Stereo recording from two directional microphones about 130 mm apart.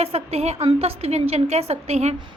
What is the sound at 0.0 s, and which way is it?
A woman's voice, 50° right (ahead or behind).